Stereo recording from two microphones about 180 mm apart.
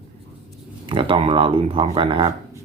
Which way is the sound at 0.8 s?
30° right (ahead or behind).